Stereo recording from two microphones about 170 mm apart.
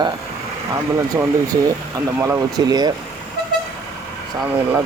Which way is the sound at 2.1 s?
15° right (ahead or behind).